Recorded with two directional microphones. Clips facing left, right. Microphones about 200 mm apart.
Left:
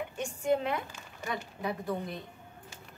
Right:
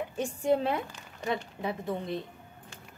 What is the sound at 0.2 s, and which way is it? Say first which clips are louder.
A woman's voice: right 3 dB; 35° right (ahead or behind).